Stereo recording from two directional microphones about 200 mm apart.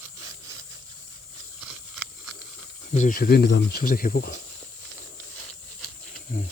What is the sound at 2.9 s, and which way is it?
Speech, 40° left (ahead or behind).